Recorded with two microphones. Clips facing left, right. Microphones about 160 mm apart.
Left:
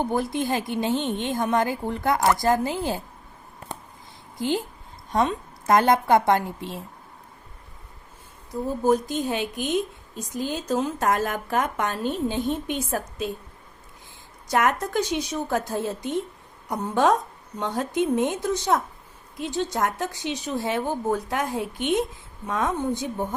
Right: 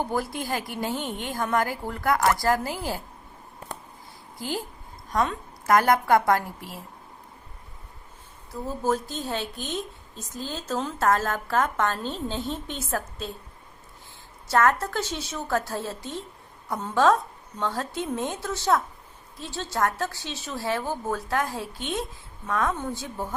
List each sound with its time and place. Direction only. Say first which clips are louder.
0.0 s a woman's voice: left 4 dB; 20° left (ahead or behind)
4.4 s a woman's voice: left 6 dB; 20° left (ahead or behind)
8.6 s a woman's voice: left 5 dB; 15° left (ahead or behind)
14.4 s a woman's voice: right 1 dB; 15° left (ahead or behind)